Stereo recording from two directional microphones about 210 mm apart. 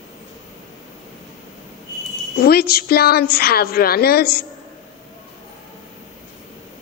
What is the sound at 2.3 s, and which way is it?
A woman's voice, 45° left (ahead or behind).